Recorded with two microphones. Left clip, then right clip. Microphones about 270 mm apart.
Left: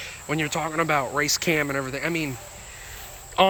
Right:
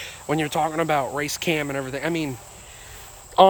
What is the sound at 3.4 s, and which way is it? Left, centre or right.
Speech, centre.